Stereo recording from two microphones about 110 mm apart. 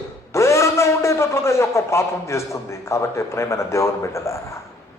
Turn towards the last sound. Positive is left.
turn(degrees=25)  # may be behind; listen again after turning